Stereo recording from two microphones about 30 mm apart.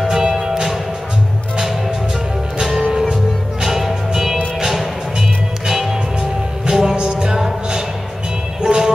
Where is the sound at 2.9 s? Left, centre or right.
Centre.